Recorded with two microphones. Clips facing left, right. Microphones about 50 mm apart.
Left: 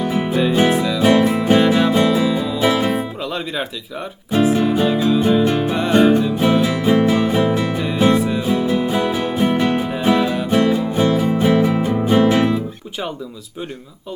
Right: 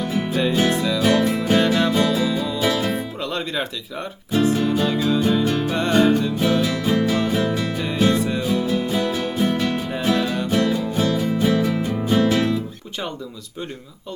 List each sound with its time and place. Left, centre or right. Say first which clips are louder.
0.0 s music: left 4 dB; left
0.7 s music: left 3 dB; centre
0.9 s music: left 5 dB; centre
1.6 s music: left 4 dB; centre
3.2 s music: left 1 dB; centre
4.5 s music: left 4 dB; centre
5.2 s music: left 4 dB; left
5.7 s music: left 3 dB; centre; by 7.8 s left
7.8 s music: left 3 dB; centre
8.4 s music: left 3 dB; left